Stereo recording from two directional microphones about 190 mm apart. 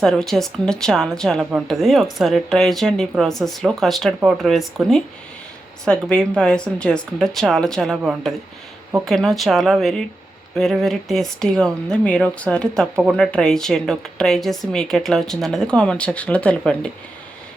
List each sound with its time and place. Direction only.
0.0 s speech: 5° left (ahead or behind)